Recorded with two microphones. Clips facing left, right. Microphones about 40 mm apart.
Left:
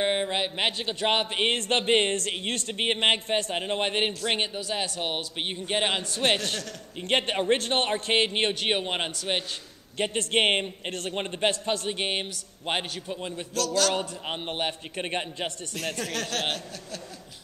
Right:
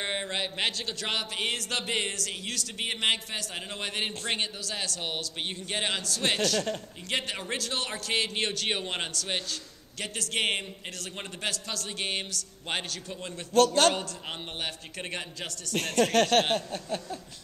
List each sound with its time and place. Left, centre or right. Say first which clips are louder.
0.0 s a man's voice: left 6 dB; centre
9.9 s a man's voice: left 7 dB; left
15.7 s speech: right 12 dB; right
16.5 s a sound: right 6 dB; right